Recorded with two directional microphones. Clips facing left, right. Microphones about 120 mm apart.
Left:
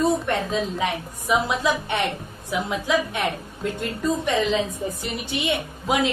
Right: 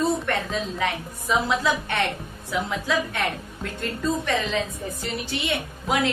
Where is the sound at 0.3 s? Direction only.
20° left (ahead or behind).